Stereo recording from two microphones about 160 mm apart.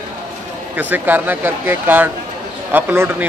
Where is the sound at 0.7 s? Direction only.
10° right (ahead or behind).